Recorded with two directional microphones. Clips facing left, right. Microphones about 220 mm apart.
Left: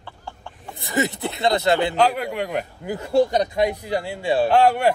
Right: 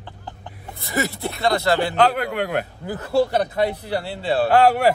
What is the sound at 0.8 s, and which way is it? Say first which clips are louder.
Speech: left 1 dB; 20° left (ahead or behind).